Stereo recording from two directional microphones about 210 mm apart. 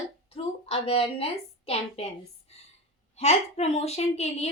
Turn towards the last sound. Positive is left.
turn(degrees=30)  # may be behind; listen again after turning